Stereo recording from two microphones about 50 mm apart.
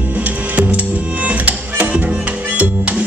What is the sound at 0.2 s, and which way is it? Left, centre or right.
Music, right.